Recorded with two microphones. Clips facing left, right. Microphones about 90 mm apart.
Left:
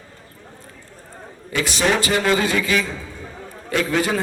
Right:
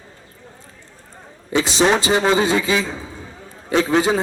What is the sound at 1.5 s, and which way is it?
A man's voice, 25° right (ahead or behind).